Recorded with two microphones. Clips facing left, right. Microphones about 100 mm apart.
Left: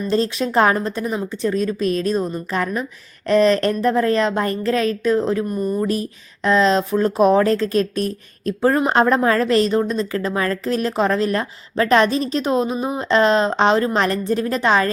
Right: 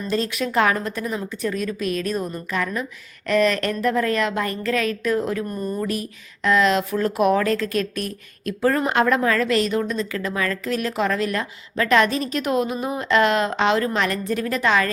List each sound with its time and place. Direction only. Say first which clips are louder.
0.1 s speech: left 4 dB; 30° left (ahead or behind)
5.5 s speech: left 5 dB; 10° left (ahead or behind)
5.8 s speech: left 4 dB; 30° left (ahead or behind)